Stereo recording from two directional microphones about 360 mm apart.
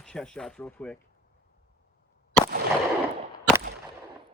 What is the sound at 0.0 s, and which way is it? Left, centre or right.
Speech, centre.